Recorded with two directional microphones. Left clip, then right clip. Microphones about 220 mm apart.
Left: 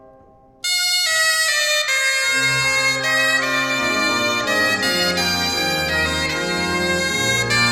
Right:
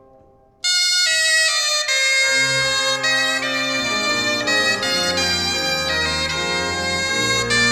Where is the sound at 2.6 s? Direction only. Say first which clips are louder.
Left 1 dB; 20° left (ahead or behind).